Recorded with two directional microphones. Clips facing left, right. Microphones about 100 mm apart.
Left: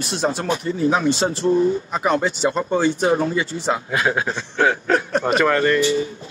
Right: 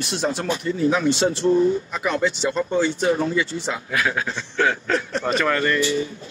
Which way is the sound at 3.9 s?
25° left (ahead or behind).